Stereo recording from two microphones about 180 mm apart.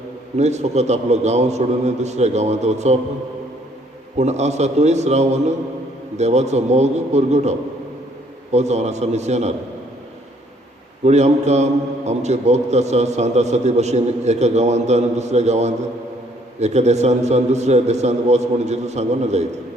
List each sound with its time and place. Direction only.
0.3 s a man's voice: 40° right (ahead or behind)
4.2 s a man's voice: 40° right (ahead or behind)
8.5 s a man's voice: 40° right (ahead or behind)
11.0 s a man's voice: 40° right (ahead or behind)